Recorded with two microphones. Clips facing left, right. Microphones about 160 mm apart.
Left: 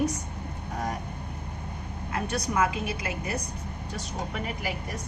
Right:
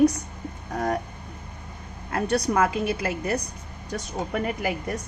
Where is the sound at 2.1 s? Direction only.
55° right (ahead or behind).